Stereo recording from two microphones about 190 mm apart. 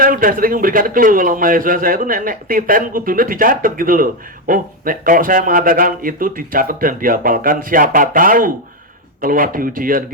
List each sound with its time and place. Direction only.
0.0 s a man's voice: 45° right (ahead or behind)